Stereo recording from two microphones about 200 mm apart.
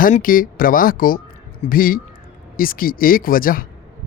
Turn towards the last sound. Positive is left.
turn(degrees=45)  # may be behind; listen again after turning